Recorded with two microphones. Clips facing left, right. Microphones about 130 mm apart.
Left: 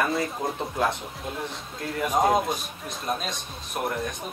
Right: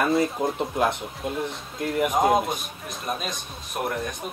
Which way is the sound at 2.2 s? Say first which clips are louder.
Right 1 dB; centre (ahead or behind).